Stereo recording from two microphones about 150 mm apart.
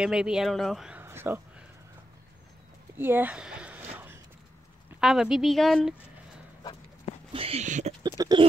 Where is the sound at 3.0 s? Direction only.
15° right (ahead or behind).